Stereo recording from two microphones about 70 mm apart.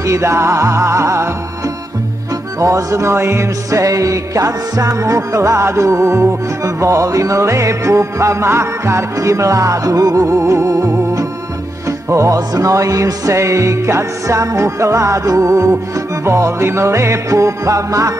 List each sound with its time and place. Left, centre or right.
0.0 s music: right
2.6 s music: right